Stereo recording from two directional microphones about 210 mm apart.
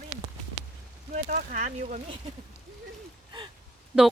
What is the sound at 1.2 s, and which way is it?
Speech, 40° right (ahead or behind).